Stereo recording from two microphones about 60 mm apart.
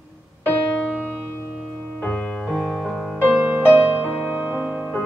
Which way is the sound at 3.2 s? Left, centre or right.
Right.